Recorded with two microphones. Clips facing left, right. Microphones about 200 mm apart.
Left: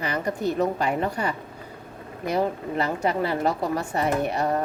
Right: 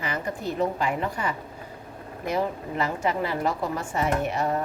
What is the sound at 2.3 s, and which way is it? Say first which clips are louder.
Speech: left 2 dB; 35° left (ahead or behind).